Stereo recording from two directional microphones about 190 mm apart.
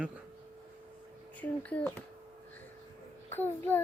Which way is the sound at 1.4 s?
5° left (ahead or behind).